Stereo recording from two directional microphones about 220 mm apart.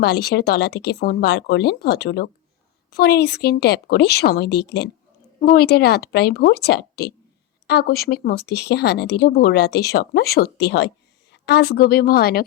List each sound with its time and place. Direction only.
0.0 s speech: 50° left (ahead or behind)